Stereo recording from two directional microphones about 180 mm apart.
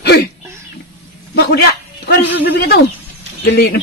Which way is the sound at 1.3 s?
65° left (ahead or behind).